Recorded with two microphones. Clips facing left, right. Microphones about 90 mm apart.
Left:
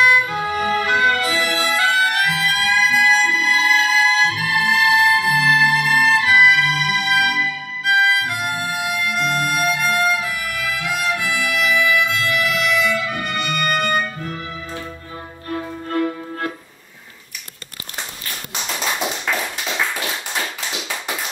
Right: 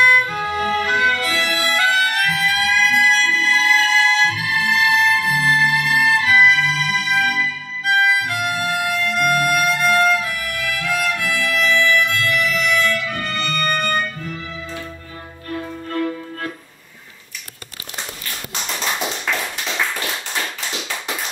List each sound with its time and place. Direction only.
0.0 s music: 5° left (ahead or behind)
1.7 s violin: 10° left (ahead or behind)
4.5 s music: 25° left (ahead or behind)
7.8 s music: 5° left (ahead or behind)
9.6 s violin: 5° left (ahead or behind)
12.4 s music: centre (ahead or behind); by 14.8 s 15° left (ahead or behind)
19.6 s tap: 5° left (ahead or behind)